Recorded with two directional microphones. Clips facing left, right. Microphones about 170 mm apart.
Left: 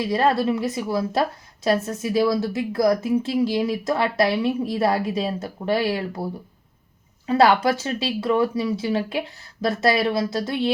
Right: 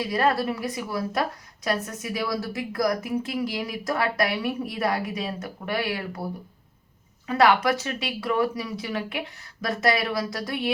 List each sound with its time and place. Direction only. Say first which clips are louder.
0.1 s a woman's voice: left 4 dB; 25° left (ahead or behind)
7.3 s a woman's voice: left 3 dB; 30° left (ahead or behind)